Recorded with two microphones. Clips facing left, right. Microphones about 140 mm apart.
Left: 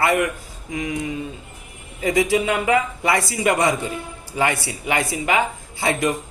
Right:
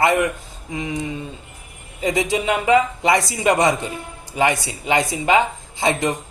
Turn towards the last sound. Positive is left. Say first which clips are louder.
# right 1 dB
turn(degrees=-20)  # may be behind; listen again after turning